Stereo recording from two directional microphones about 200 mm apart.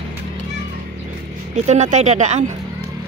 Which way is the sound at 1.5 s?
35° right (ahead or behind).